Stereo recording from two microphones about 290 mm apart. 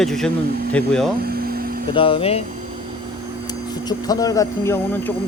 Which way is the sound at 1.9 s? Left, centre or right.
Centre.